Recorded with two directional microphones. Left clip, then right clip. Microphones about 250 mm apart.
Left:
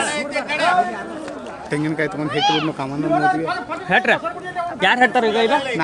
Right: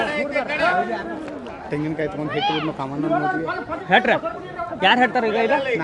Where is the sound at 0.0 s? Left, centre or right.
Left.